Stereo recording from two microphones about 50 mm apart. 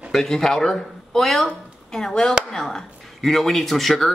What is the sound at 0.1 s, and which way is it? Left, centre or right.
Speech, centre.